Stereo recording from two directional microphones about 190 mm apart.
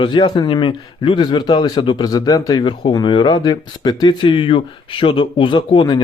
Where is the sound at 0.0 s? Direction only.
25° left (ahead or behind).